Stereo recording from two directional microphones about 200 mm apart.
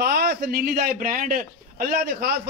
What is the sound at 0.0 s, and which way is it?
A man's voice, 50° right (ahead or behind).